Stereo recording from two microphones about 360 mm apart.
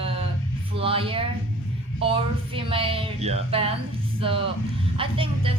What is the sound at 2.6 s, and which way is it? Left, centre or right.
Speech, centre.